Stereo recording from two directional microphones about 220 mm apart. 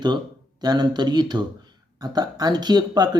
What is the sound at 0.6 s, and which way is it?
Speech, 20° right (ahead or behind).